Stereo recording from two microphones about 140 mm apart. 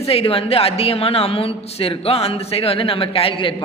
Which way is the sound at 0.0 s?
45° left (ahead or behind).